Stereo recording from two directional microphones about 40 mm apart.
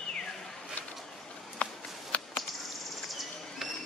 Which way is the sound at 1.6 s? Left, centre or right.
Left.